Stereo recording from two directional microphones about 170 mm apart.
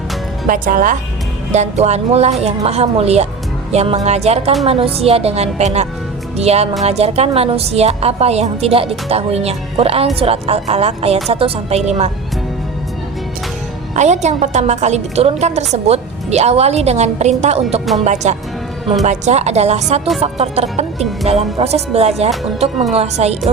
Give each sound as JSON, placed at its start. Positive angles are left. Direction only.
{"t": 0.4, "sound": "speech", "side_deg": -55}
{"t": 1.5, "sound": "a woman's voice", "side_deg": -40}
{"t": 13.9, "sound": "a woman's voice", "side_deg": -45}